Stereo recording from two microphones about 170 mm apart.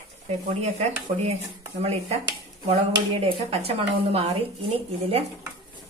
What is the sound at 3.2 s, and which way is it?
Speech, 35° right (ahead or behind).